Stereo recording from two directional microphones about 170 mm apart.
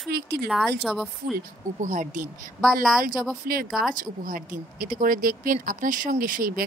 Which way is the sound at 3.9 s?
50° right (ahead or behind).